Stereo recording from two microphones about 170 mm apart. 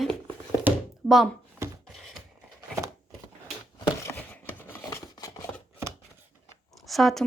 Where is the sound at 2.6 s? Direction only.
20° right (ahead or behind).